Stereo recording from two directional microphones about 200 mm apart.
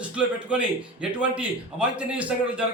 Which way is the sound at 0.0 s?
5° right (ahead or behind).